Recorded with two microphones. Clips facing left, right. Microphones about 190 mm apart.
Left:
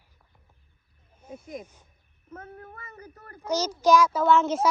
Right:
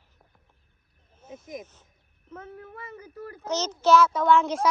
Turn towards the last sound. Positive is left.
turn(degrees=0)  # may be behind; listen again after turning